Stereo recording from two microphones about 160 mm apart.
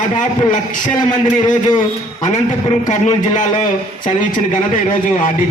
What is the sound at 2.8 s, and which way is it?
A man's voice, 50° left (ahead or behind).